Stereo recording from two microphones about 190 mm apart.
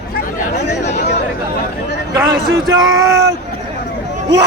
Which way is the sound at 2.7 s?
20° right (ahead or behind).